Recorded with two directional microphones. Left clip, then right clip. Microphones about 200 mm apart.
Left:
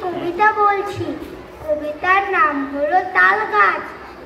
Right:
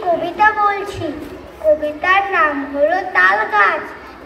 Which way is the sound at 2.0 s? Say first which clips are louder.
Left 2 dB; 35° right (ahead or behind).